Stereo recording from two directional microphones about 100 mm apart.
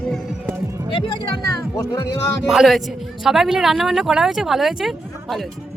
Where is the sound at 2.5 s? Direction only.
5° right (ahead or behind).